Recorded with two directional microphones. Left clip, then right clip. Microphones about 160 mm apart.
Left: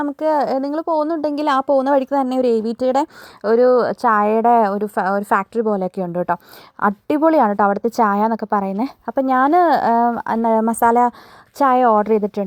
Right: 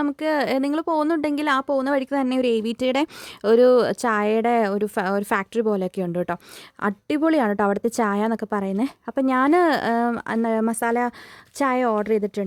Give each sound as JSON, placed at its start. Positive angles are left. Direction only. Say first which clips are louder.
{"t": 0.2, "sound": "a woman's voice", "louder": "left 7 dB", "side_deg": -5}
{"t": 0.4, "sound": "speech", "louder": "left 3 dB", "side_deg": -40}
{"t": 1.2, "sound": "a woman's voice", "louder": "left 4 dB", "side_deg": 0}
{"t": 1.5, "sound": "a woman's voice", "louder": "left 7 dB", "side_deg": 10}
{"t": 2.8, "sound": "speech", "louder": "left 5 dB", "side_deg": -45}
{"t": 3.6, "sound": "a woman's voice", "louder": "left 4 dB", "side_deg": -25}